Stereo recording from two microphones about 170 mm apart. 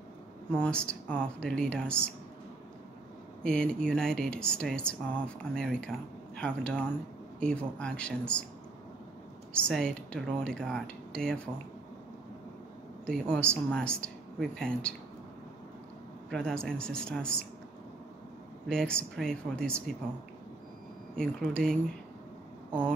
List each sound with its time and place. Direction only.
0.5 s speech: 5° left (ahead or behind)
3.4 s speech: 5° left (ahead or behind)
9.5 s speech: 5° left (ahead or behind)
13.0 s speech: 5° left (ahead or behind)
16.3 s speech: 5° left (ahead or behind)
18.7 s speech: 5° left (ahead or behind)
21.2 s speech: 5° left (ahead or behind)